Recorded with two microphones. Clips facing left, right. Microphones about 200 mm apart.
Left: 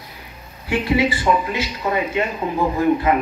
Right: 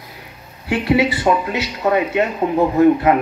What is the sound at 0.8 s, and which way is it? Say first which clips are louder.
Speech: right 3 dB; 65° right (ahead or behind).